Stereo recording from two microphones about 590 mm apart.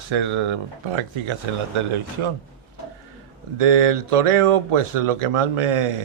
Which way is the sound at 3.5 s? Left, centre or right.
Right.